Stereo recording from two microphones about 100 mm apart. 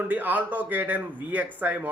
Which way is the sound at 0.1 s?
15° right (ahead or behind).